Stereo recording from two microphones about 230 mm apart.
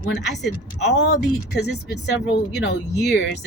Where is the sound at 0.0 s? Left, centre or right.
Left.